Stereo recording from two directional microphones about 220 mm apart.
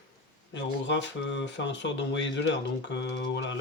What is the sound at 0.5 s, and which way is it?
Speech, 55° left (ahead or behind).